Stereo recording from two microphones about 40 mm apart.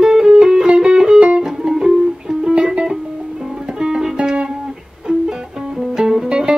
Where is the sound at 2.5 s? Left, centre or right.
Right.